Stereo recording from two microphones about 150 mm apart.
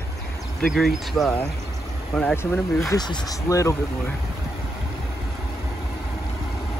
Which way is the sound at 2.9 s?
25° left (ahead or behind).